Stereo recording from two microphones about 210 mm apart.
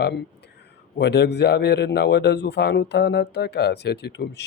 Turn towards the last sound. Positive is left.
turn(degrees=50)  # may be behind; listen again after turning